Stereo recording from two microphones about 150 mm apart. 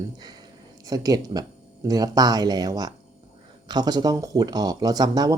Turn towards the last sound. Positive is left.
turn(degrees=-25)  # may be behind; listen again after turning